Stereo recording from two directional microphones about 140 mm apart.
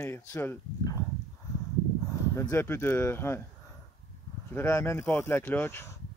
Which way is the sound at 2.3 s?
15° left (ahead or behind).